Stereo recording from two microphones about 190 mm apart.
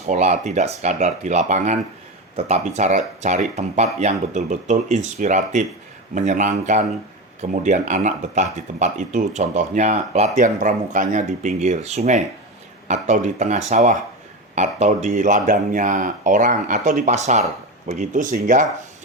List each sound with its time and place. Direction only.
0.0 s speech: 35° right (ahead or behind)